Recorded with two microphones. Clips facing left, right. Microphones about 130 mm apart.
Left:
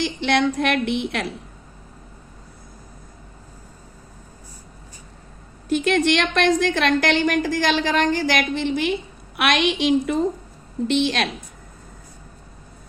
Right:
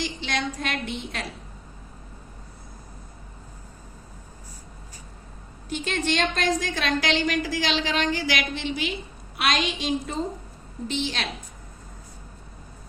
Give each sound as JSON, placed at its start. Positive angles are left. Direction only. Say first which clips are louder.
{"t": 0.0, "sound": "a woman's voice", "louder": "left 9 dB", "side_deg": 65}
{"t": 5.6, "sound": "a woman's voice", "louder": "left 9 dB", "side_deg": 90}